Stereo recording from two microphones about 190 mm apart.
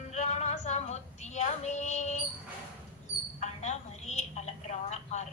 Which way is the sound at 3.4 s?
35° left (ahead or behind).